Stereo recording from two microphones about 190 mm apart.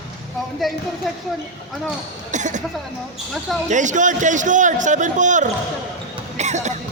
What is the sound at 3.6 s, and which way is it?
A man's voice, 40° right (ahead or behind).